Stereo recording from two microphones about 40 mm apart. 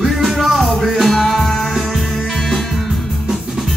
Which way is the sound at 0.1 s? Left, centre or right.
Centre.